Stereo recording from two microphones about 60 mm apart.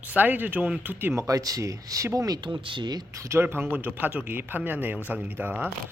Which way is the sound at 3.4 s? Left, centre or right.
Right.